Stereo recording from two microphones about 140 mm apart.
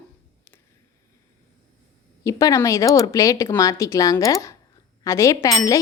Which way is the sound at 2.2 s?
25° left (ahead or behind).